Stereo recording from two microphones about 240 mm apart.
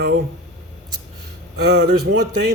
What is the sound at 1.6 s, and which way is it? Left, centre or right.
Speech, right.